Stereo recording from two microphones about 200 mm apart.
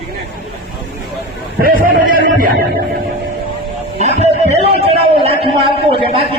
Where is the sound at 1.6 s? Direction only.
45° right (ahead or behind).